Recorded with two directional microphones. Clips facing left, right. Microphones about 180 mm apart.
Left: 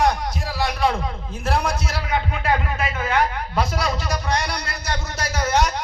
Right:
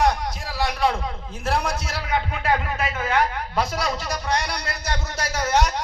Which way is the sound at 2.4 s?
40° right (ahead or behind).